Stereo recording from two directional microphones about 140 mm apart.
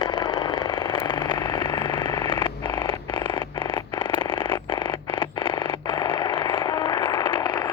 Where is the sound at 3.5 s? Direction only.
40° left (ahead or behind).